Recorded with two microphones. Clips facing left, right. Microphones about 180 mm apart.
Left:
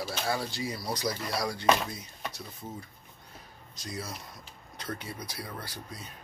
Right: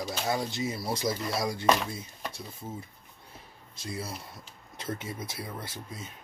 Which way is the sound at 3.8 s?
25° right (ahead or behind).